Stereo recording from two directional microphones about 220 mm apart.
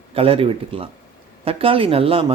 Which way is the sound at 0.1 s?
25° right (ahead or behind).